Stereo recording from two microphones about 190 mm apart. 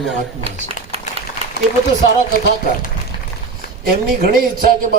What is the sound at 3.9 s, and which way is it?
Speech, 50° right (ahead or behind).